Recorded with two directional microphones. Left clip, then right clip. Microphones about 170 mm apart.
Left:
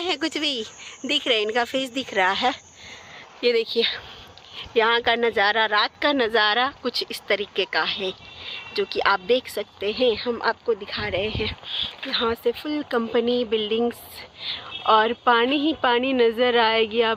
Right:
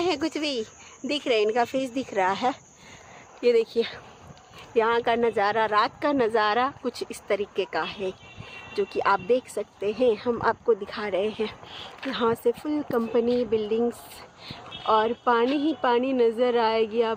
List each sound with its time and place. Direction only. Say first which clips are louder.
0.0 s speech: left 2 dB; 5° right (ahead or behind)
15.0 s speech: left 3 dB; 5° right (ahead or behind)